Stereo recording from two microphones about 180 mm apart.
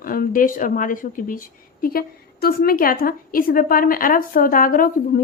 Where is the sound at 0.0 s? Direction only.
50° left (ahead or behind).